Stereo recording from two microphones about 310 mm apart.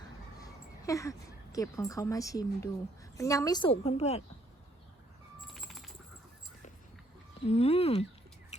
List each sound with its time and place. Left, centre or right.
0.8 s a sound: centre
1.5 s a woman's voice: centre
5.4 s bird: centre
7.4 s speech: centre